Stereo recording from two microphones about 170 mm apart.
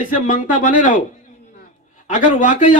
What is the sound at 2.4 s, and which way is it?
Speech, 50° left (ahead or behind).